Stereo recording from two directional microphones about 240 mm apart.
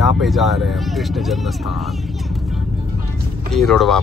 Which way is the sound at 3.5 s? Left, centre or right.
Centre.